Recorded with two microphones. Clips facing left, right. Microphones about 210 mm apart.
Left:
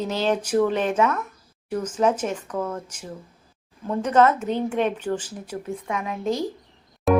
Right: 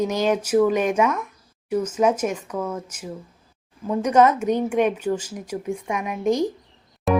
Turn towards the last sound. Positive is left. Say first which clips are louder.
# left 2 dB
turn(degrees=0)  # may be behind; listen again after turning